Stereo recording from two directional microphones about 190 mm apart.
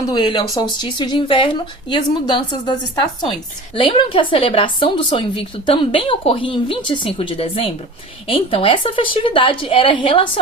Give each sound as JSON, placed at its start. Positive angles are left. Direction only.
{"t": 0.1, "sound": "a woman's voice", "side_deg": 25}